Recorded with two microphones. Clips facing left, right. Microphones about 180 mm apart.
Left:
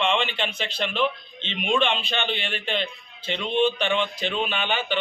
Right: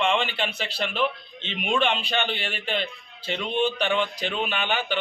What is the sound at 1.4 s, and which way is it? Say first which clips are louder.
Speech: left 1 dB; 45° right (ahead or behind).